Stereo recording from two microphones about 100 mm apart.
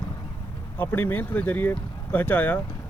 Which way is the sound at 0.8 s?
20° left (ahead or behind).